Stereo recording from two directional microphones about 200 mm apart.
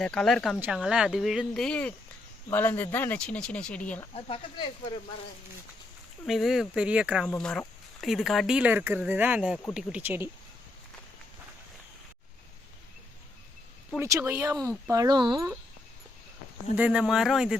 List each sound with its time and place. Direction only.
0.0 s speech: 5° left (ahead or behind)
4.1 s speech: 30° left (ahead or behind)
6.2 s speech: centre (ahead or behind)
13.9 s speech: 10° right (ahead or behind)
16.7 s speech: 5° right (ahead or behind)